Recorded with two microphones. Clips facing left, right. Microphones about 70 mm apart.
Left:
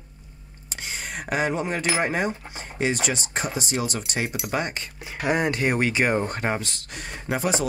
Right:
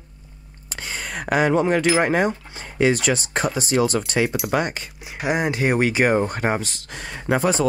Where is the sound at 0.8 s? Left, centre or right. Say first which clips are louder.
Right 3 dB; right.